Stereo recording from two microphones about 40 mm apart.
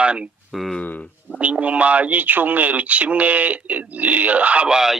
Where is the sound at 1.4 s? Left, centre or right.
Right.